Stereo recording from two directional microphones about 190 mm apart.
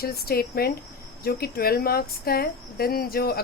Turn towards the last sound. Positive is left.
turn(degrees=55)  # may be behind; listen again after turning